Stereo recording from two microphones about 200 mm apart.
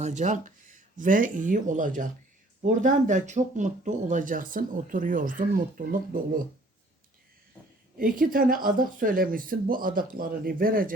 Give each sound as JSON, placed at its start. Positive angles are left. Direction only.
{"t": 0.0, "sound": "speech", "side_deg": -35}
{"t": 7.9, "sound": "speech", "side_deg": -45}